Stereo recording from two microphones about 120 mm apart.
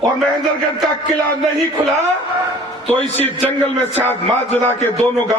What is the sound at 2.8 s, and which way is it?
A man's voice, 15° left (ahead or behind).